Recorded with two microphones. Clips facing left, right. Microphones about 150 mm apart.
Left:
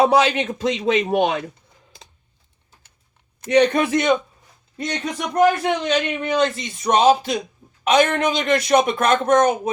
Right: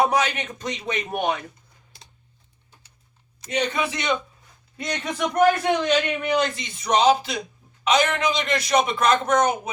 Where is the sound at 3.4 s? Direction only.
65° left (ahead or behind); by 4.1 s 50° left (ahead or behind).